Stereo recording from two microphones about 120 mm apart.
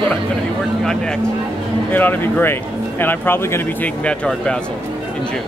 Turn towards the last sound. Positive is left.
turn(degrees=10)  # may be behind; listen again after turning